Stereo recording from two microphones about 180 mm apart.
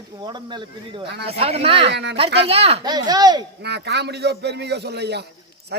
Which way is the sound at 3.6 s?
65° right (ahead or behind).